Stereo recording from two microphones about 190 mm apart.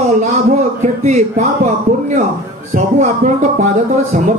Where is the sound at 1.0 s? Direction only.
40° right (ahead or behind).